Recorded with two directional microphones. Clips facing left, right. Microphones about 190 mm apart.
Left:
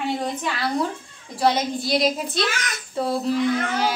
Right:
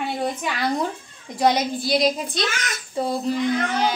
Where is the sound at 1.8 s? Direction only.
Centre (ahead or behind).